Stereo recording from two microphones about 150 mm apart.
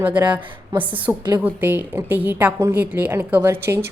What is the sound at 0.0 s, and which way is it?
A woman's voice, 10° right (ahead or behind).